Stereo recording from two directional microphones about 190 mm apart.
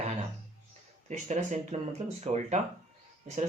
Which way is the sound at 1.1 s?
40° right (ahead or behind).